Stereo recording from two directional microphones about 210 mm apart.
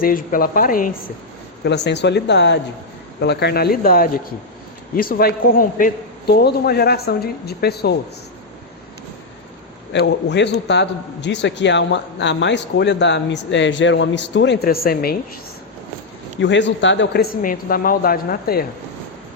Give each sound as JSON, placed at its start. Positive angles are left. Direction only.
{"t": 0.0, "sound": "speech", "side_deg": 45}
{"t": 1.6, "sound": "a man's voice", "side_deg": 55}
{"t": 9.9, "sound": "a man's voice", "side_deg": 55}
{"t": 16.4, "sound": "a man's voice", "side_deg": 60}